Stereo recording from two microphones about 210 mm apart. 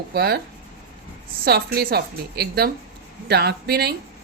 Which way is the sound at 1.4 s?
50° right (ahead or behind).